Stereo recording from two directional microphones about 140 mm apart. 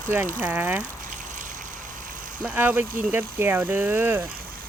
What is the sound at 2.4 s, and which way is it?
Speech, 10° right (ahead or behind).